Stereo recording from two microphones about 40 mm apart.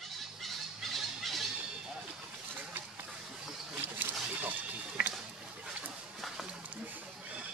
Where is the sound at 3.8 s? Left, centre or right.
Right.